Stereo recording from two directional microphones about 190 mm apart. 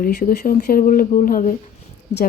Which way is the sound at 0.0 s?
50° left (ahead or behind).